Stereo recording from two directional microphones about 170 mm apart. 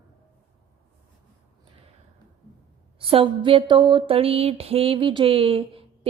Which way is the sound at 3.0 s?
30° right (ahead or behind).